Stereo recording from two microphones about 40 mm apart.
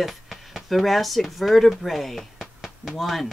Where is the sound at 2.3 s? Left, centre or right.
Centre.